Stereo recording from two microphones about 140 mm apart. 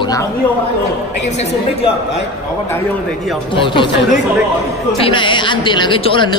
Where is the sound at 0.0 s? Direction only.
25° left (ahead or behind).